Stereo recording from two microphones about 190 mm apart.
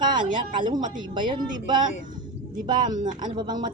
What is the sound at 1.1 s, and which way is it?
Speech, 25° right (ahead or behind).